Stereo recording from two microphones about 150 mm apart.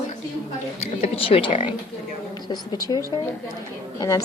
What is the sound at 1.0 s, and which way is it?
A woman's voice, 40° left (ahead or behind).